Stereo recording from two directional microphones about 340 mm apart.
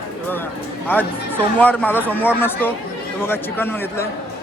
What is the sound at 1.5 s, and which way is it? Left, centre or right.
Speech, centre.